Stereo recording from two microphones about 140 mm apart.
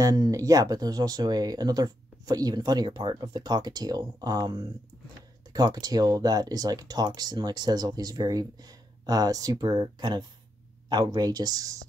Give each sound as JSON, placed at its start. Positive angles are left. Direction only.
{"t": 0.0, "sound": "speech", "side_deg": -25}